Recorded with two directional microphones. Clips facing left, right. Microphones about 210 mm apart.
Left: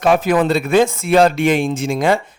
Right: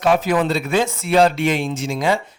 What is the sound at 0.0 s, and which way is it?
Speech, 55° left (ahead or behind).